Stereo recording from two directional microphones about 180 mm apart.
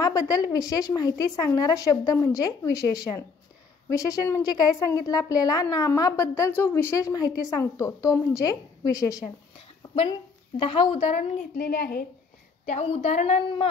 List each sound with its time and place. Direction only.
0.0 s a woman's voice: 20° left (ahead or behind)
10.6 s a woman's voice: 30° left (ahead or behind)
11.5 s a woman's voice: 55° left (ahead or behind)
12.6 s a woman's voice: 35° left (ahead or behind)